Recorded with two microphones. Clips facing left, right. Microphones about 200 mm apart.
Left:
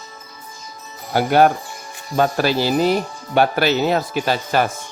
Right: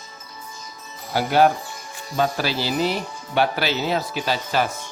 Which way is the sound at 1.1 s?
50° left (ahead or behind).